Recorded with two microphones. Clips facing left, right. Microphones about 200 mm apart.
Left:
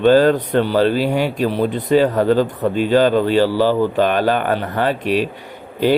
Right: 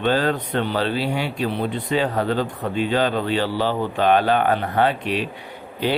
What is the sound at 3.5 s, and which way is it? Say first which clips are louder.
Speech: left 7 dB; 90° left.